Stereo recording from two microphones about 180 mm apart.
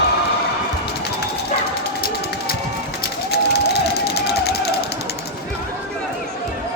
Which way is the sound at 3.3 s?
65° left (ahead or behind).